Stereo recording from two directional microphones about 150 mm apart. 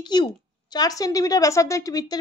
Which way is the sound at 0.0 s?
30° left (ahead or behind).